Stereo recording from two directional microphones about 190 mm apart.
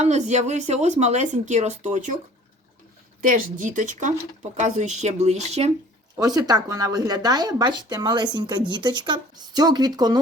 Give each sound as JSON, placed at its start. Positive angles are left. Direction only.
{"t": 0.0, "sound": "speech", "side_deg": -35}
{"t": 3.2, "sound": "speech", "side_deg": -45}
{"t": 6.1, "sound": "speech", "side_deg": -20}